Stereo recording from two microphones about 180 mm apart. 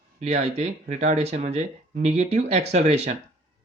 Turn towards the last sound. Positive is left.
turn(degrees=-35)  # may be behind; listen again after turning